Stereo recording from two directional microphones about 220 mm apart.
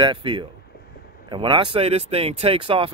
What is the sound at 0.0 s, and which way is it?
Speech, 20° right (ahead or behind).